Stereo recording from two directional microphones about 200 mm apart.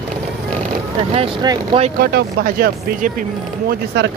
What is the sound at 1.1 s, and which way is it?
Speech, 25° right (ahead or behind).